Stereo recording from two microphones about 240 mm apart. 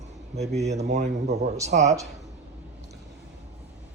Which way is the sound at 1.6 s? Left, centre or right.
Right.